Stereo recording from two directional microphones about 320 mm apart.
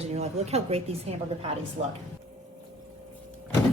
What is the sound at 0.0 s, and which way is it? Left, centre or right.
A woman's voice, centre.